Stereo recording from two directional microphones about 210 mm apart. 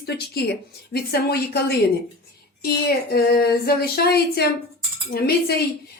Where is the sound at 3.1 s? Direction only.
50° left (ahead or behind).